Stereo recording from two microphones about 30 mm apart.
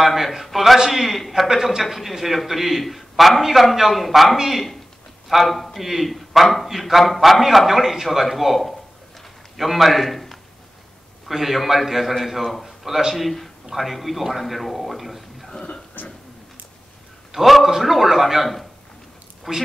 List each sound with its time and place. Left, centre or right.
0.0 s a man's voice: centre
11.2 s a man's voice: centre
13.1 s a man's voice: centre
16.0 s a sound: left
17.3 s a man's voice: centre
19.5 s speech: centre